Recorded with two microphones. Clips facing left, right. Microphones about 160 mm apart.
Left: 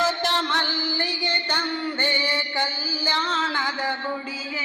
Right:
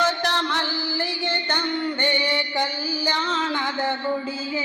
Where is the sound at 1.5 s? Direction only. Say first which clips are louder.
Right 2 dB; 15° right (ahead or behind).